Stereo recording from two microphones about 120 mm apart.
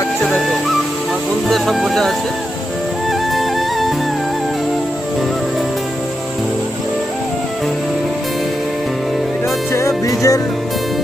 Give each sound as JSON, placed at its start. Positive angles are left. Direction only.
{"t": 1.5, "sound": "speech", "side_deg": 0}
{"t": 3.1, "sound": "music", "side_deg": 0}
{"t": 9.7, "sound": "music", "side_deg": 25}